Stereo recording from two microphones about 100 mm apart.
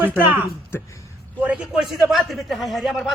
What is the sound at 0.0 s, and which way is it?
Speech, 15° right (ahead or behind).